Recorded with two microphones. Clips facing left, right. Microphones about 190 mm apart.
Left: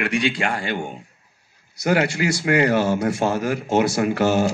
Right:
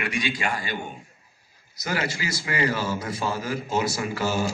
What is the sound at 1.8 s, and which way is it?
A man's voice, 70° left (ahead or behind).